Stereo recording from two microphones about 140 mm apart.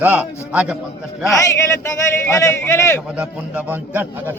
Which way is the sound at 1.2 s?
20° left (ahead or behind).